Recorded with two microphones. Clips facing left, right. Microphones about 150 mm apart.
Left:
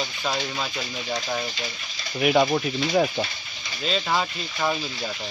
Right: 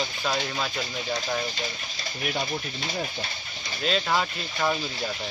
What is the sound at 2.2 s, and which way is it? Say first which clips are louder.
Speech: left 10 dB; 90° left.